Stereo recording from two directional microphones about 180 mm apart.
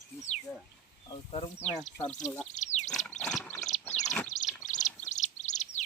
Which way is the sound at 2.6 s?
40° left (ahead or behind).